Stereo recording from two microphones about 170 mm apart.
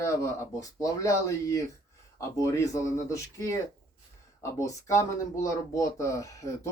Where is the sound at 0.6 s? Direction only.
20° left (ahead or behind).